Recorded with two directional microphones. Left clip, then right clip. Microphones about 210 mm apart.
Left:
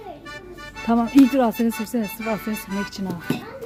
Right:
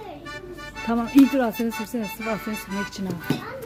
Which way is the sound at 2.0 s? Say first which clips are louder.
Left 1 dB; centre (ahead or behind).